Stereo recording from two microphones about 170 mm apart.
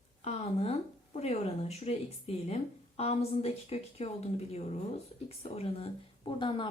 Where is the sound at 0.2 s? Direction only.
40° left (ahead or behind).